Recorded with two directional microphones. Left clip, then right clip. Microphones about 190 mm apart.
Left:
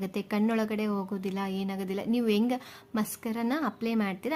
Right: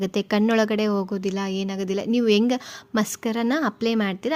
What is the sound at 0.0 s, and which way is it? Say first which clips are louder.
A woman's voice: right 8 dB; 30° right (ahead or behind).